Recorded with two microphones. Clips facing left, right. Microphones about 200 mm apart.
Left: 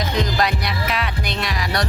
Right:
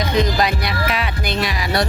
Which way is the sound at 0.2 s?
Centre (ahead or behind).